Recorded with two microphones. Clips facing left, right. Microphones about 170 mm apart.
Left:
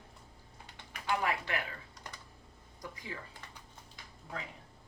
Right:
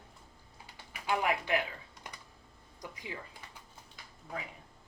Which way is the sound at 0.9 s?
15° right (ahead or behind).